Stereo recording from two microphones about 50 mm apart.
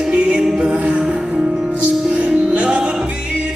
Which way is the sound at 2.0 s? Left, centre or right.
Centre.